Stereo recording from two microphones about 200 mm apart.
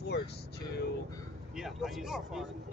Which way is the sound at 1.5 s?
Centre (ahead or behind).